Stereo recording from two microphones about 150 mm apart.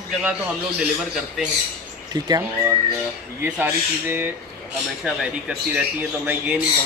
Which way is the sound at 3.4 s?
15° right (ahead or behind).